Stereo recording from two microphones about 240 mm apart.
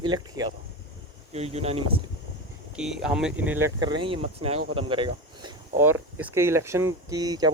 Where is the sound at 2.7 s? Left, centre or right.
Centre.